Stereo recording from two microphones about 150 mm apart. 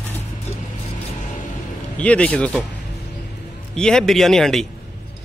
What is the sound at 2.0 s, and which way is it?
Speech, 10° left (ahead or behind).